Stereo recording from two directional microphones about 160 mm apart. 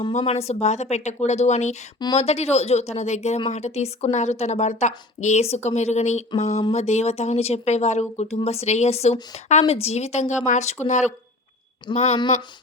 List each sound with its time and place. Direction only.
0.1 s speech: 45° left (ahead or behind)